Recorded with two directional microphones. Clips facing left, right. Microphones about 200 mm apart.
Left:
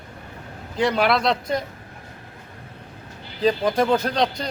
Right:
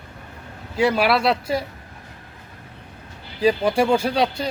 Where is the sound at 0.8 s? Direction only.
5° right (ahead or behind).